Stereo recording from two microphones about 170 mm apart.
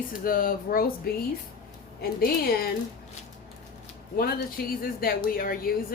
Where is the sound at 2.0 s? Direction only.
65° left (ahead or behind).